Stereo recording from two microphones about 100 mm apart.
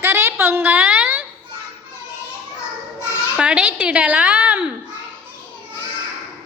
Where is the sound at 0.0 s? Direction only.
25° right (ahead or behind).